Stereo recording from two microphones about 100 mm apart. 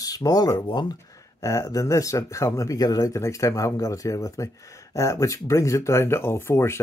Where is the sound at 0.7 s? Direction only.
50° left (ahead or behind).